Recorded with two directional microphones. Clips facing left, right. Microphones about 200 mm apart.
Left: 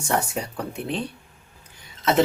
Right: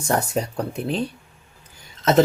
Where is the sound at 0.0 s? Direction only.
40° right (ahead or behind).